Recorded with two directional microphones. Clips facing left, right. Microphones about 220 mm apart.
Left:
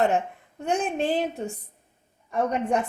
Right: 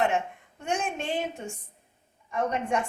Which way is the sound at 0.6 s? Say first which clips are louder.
Left 5 dB; 35° left (ahead or behind).